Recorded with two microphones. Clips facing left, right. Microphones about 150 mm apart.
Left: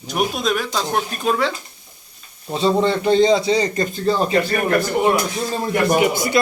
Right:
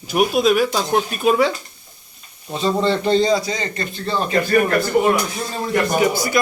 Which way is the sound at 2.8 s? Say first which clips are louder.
Left 1 dB; 10° left (ahead or behind).